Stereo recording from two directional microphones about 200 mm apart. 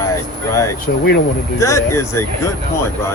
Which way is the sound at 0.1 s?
15° left (ahead or behind).